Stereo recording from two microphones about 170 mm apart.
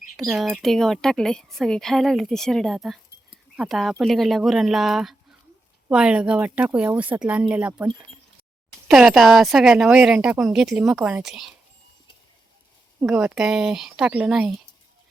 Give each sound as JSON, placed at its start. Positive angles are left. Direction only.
{"t": 0.2, "sound": "a woman's voice", "side_deg": 0}
{"t": 8.9, "sound": "a woman's voice", "side_deg": 0}
{"t": 13.0, "sound": "a woman's voice", "side_deg": -5}